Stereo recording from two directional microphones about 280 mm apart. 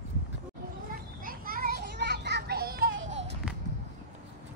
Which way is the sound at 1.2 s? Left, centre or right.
Right.